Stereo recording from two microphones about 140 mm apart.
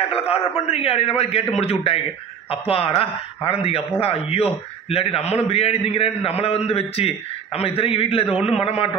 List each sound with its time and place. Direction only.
0.3 s a man's voice: 45° left (ahead or behind)